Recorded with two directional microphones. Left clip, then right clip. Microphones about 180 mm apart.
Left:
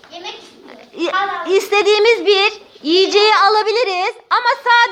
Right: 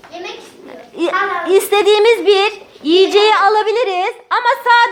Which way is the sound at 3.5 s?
15° left (ahead or behind).